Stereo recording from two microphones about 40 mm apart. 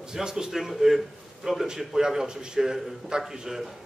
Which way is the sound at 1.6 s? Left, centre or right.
Centre.